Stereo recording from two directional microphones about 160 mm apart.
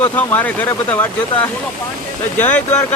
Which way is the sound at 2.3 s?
10° left (ahead or behind).